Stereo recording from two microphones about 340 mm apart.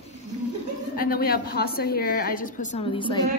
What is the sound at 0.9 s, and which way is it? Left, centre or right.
A woman's voice, left.